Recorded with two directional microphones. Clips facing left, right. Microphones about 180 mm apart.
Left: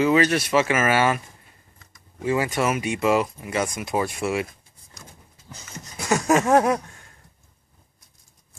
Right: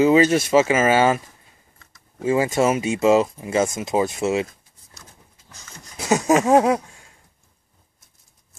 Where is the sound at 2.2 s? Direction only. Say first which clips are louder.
Right 4 dB; 25° right (ahead or behind).